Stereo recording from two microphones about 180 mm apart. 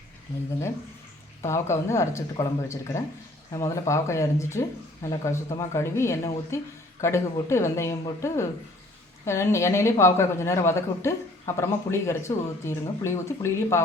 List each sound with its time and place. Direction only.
1.4 s a woman's voice: 15° left (ahead or behind)